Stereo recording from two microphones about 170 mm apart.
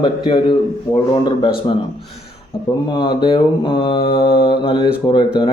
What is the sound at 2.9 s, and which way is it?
Speech, 25° left (ahead or behind).